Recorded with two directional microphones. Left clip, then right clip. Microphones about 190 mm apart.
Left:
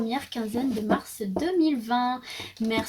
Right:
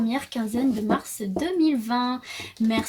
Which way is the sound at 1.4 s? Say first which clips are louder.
Right 1 dB; 35° right (ahead or behind).